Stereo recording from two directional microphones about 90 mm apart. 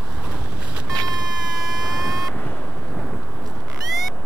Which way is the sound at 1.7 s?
Centre (ahead or behind).